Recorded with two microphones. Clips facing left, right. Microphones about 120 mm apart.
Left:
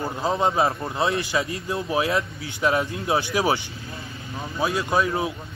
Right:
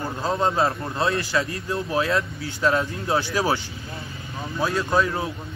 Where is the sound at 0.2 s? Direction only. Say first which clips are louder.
Even; 15° left (ahead or behind).